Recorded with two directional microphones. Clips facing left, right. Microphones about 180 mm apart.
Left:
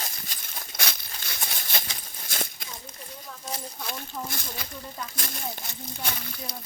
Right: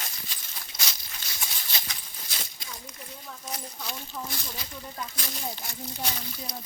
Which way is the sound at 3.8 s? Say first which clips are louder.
Left 2 dB; 55° left (ahead or behind).